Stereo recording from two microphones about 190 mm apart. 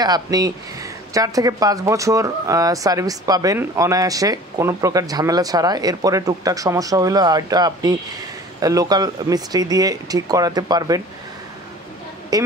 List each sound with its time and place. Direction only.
0.0 s speech: 20° right (ahead or behind)
12.3 s speech: 20° right (ahead or behind)